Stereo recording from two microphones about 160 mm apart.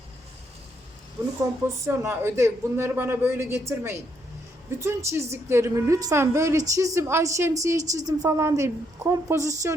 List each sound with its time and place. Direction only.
1.6 s a man's voice: 15° right (ahead or behind)